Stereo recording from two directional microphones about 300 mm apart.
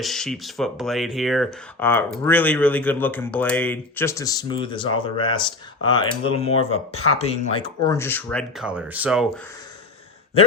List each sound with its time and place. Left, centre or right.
0.0 s speech: centre
7.9 s speech: centre